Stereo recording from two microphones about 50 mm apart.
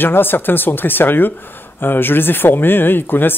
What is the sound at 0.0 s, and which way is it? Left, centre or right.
Speech, left.